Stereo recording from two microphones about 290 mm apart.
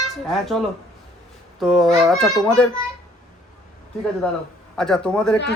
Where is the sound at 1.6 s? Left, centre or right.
Centre.